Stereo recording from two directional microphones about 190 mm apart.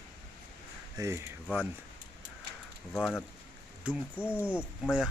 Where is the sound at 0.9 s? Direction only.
15° right (ahead or behind).